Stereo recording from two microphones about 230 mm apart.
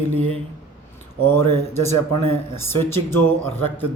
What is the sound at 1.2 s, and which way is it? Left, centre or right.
Speech, centre.